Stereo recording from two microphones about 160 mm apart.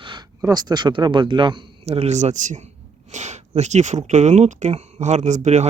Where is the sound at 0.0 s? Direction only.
30° right (ahead or behind).